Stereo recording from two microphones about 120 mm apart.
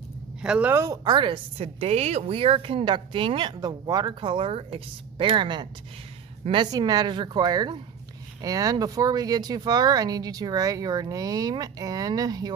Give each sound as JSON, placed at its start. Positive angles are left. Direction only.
{"t": 0.4, "sound": "speech", "side_deg": -10}
{"t": 0.7, "sound": "a woman's voice", "side_deg": -35}